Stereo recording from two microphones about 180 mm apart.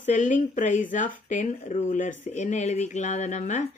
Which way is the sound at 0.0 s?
45° left (ahead or behind).